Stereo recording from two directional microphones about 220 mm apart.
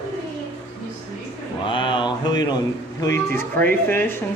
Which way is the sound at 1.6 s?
20° left (ahead or behind).